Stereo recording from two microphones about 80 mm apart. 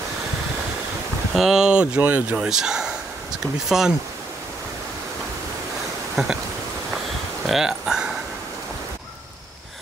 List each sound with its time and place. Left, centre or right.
1.3 s speech: centre; by 2.3 s right
2.3 s speech: centre
6.1 s insect: centre
7.4 s a sound: centre